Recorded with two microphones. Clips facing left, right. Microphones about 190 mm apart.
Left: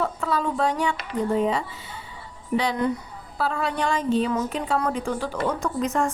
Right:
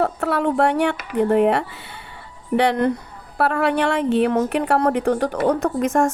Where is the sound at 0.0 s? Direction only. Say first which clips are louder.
Right 5 dB; 65° right (ahead or behind).